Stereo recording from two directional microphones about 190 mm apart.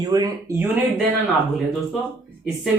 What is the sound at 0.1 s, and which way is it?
Speech, 20° right (ahead or behind).